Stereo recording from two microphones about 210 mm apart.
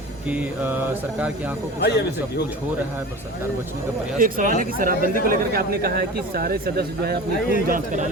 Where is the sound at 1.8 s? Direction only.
50° left (ahead or behind).